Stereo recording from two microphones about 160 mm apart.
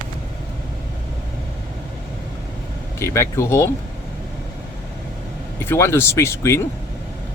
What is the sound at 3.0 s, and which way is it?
Speech, 15° left (ahead or behind).